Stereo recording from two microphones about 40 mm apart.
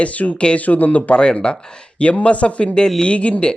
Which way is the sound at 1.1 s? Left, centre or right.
Left.